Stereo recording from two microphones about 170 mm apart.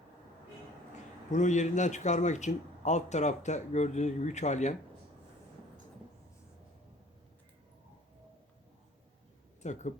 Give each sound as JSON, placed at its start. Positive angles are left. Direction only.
{"t": 1.3, "sound": "speech", "side_deg": 45}
{"t": 9.6, "sound": "speech", "side_deg": 45}